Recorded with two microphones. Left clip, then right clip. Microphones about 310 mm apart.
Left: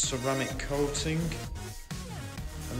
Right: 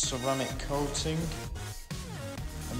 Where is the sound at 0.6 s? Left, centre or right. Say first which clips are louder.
Left 2 dB; centre.